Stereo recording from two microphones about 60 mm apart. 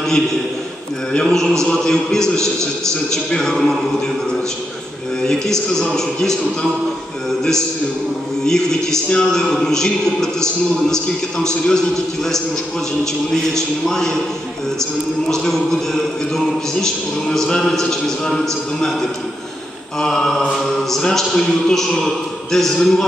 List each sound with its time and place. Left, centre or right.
0.0 s a man's voice: centre
5.2 s speech: centre
8.5 s speech: centre
13.0 s speech: centre
15.2 s speech: centre